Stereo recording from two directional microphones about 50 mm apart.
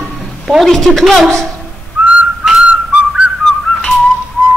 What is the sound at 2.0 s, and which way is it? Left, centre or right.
Whistling, right.